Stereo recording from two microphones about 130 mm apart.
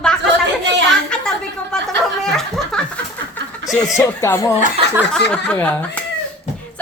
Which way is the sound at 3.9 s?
20° left (ahead or behind).